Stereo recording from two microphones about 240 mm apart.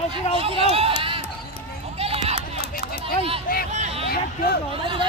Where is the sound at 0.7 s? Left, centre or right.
Right.